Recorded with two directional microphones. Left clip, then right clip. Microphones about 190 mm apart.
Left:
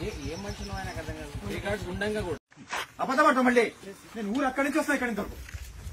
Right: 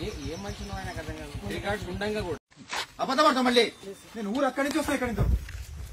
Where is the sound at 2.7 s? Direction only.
Centre (ahead or behind).